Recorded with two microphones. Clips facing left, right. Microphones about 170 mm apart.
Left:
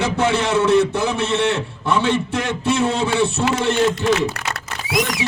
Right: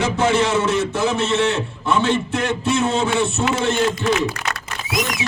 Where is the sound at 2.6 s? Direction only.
60° left (ahead or behind).